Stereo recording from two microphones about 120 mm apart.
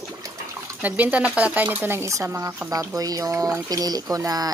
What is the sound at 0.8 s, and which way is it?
Speech, 10° right (ahead or behind).